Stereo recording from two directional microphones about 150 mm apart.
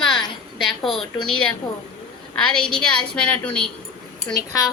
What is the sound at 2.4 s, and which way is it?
A woman's voice, 5° left (ahead or behind).